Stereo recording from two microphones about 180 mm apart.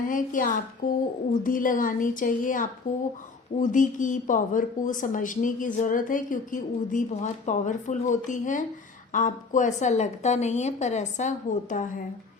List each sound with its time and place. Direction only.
0.1 s a woman's voice: 45° left (ahead or behind)